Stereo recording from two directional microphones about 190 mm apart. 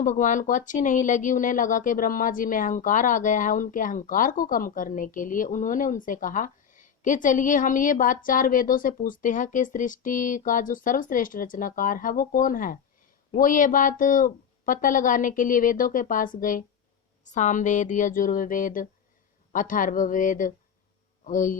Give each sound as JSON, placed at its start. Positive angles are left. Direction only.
{"t": 0.0, "sound": "speech", "side_deg": 45}